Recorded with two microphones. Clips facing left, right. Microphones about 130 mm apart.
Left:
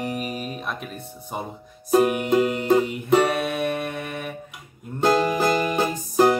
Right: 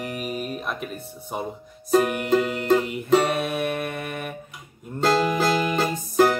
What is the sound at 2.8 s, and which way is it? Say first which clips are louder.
Music: left 1 dB; centre (ahead or behind).